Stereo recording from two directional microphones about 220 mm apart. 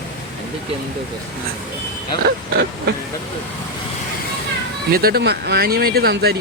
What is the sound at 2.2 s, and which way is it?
Speech, 50° right (ahead or behind).